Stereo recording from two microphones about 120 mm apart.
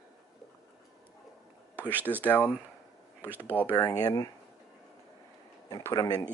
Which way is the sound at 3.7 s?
30° left (ahead or behind).